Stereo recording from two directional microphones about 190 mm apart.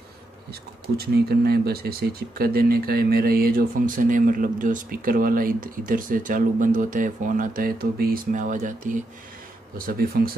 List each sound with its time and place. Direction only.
0.5 s speech: 55° right (ahead or behind)